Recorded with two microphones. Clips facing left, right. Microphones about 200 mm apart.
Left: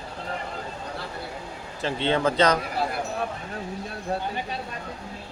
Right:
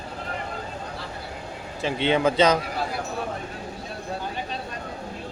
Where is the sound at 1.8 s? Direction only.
15° right (ahead or behind).